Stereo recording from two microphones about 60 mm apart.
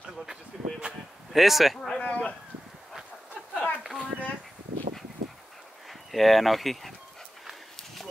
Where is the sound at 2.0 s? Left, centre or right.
Left.